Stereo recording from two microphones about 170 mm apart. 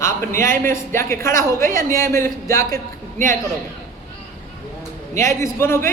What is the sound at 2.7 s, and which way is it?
Speech, 55° right (ahead or behind).